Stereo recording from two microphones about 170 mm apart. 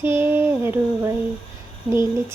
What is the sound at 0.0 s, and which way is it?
Female singing, 15° right (ahead or behind).